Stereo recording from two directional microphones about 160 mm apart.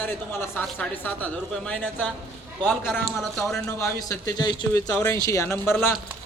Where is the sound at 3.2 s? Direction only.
Centre (ahead or behind).